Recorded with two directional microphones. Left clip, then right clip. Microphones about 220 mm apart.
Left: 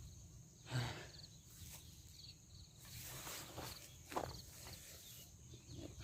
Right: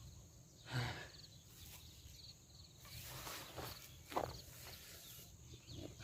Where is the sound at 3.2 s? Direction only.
20° left (ahead or behind).